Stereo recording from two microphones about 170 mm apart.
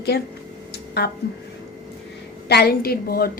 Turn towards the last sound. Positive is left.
turn(degrees=60)  # may be behind; listen again after turning